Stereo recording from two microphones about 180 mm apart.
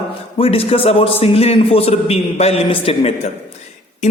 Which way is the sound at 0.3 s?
30° left (ahead or behind).